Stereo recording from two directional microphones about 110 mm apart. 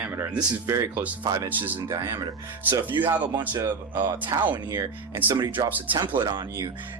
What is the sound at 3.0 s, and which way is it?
Speech, 15° right (ahead or behind).